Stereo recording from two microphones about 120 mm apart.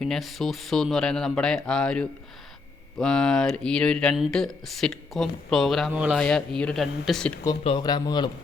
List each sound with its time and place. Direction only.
0.0 s speech: centre (ahead or behind)
5.9 s speech: 15° right (ahead or behind)
6.1 s speech: 5° left (ahead or behind)
7.8 s speech: 35° left (ahead or behind)